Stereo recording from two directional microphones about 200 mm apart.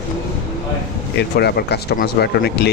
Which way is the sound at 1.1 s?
55° left (ahead or behind).